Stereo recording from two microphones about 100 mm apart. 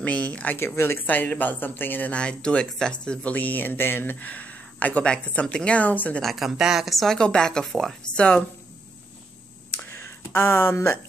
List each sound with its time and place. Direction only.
0.0 s speech: 10° left (ahead or behind)
6.2 s speech: centre (ahead or behind)
9.9 s speech: 20° left (ahead or behind)